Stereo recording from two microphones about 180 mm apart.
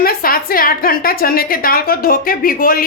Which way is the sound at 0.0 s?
55° left (ahead or behind).